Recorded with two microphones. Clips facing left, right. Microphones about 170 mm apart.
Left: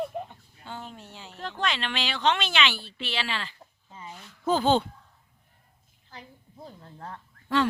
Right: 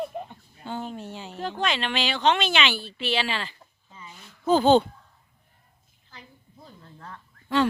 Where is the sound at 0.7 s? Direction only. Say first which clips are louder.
Right 8 dB; 20° right (ahead or behind).